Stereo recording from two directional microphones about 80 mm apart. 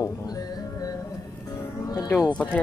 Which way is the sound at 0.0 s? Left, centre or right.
Left.